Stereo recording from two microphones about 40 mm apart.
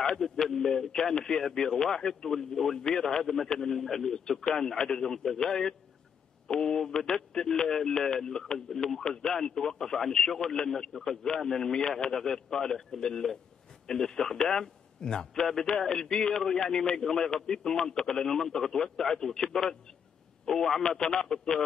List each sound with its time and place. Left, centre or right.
0.0 s a man's voice: centre